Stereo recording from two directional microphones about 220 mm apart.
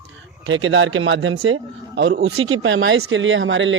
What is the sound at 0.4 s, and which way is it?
Speech, 60° right (ahead or behind).